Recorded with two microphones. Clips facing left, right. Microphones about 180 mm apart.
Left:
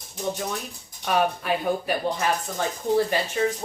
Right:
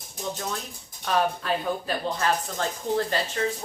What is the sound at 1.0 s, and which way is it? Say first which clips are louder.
Speech: left 2 dB; 15° left (ahead or behind).